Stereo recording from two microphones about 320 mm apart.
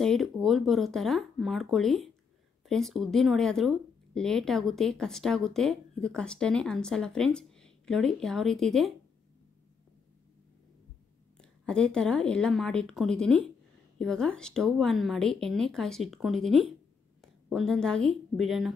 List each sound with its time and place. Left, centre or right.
0.0 s speech: centre
11.3 s a woman's voice: centre